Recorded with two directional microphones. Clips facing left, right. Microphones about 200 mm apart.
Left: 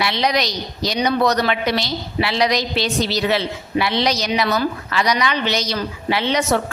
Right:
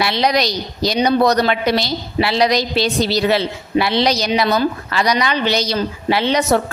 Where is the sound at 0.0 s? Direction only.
35° right (ahead or behind).